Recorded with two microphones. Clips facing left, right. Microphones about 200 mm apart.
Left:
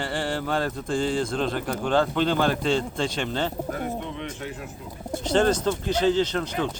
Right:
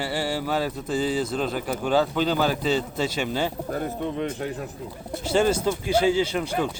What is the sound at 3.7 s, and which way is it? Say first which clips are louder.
Speech: right 3 dB; 40° right (ahead or behind).